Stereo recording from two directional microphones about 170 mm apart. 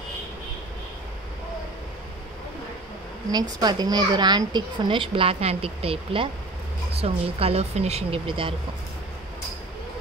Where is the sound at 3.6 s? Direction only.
25° right (ahead or behind).